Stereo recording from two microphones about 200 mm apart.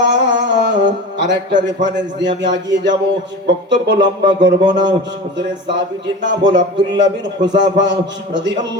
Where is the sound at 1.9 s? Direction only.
65° right (ahead or behind).